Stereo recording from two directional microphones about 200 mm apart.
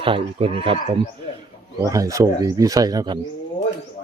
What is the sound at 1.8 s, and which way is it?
Speech, 15° right (ahead or behind).